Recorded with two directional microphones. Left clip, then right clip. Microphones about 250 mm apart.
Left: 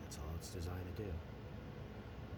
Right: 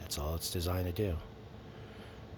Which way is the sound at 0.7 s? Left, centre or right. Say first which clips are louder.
Right 14 dB; right.